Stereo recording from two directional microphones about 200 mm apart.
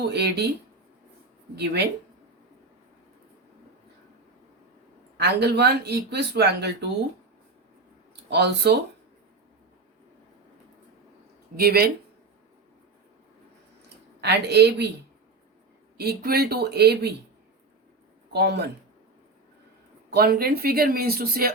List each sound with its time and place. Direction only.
0.1 s speech: 55° right (ahead or behind)
1.5 s speech: 55° right (ahead or behind)
5.1 s speech: 55° right (ahead or behind)
8.3 s speech: 55° right (ahead or behind)
11.5 s speech: 50° right (ahead or behind)
14.2 s speech: 55° right (ahead or behind)
16.0 s speech: 50° right (ahead or behind)
18.3 s speech: 55° right (ahead or behind)
20.1 s speech: 50° right (ahead or behind)